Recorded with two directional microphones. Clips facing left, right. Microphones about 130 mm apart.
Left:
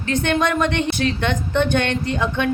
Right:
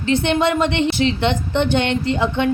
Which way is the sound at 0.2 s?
15° right (ahead or behind).